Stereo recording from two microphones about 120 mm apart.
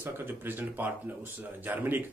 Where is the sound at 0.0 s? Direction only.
20° right (ahead or behind).